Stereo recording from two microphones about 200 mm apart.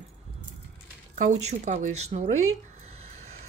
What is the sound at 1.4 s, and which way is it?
Speech, 35° right (ahead or behind).